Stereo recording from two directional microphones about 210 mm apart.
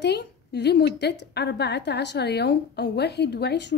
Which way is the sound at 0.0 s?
55° left (ahead or behind).